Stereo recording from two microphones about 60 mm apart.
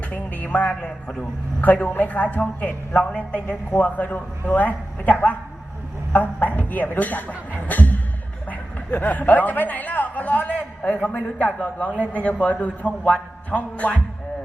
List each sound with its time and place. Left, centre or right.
0.1 s a man's voice: left
3.0 s a man's voice: centre
3.7 s a man's voice: left